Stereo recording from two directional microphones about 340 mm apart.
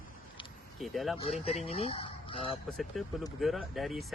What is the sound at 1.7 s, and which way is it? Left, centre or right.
Speech, centre.